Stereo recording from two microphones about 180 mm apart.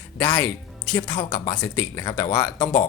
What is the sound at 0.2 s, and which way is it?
Speech, 10° left (ahead or behind).